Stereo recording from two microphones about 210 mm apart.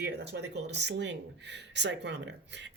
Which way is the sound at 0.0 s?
55° right (ahead or behind).